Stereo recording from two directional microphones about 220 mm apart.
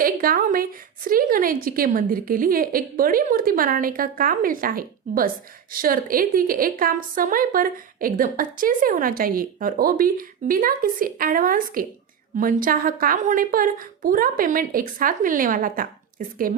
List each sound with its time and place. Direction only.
0.0 s a woman's voice: 40° right (ahead or behind)